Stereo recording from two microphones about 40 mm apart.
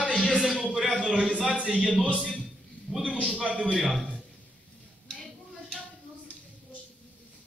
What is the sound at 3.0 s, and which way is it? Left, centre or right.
Speech, right.